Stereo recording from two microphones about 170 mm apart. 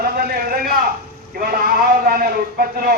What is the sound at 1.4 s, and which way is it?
Sheep, 60° right (ahead or behind).